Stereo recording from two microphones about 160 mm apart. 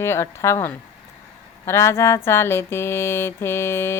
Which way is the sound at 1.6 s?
15° left (ahead or behind).